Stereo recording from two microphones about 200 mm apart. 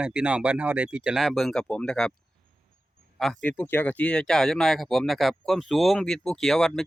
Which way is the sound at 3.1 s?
Centre (ahead or behind).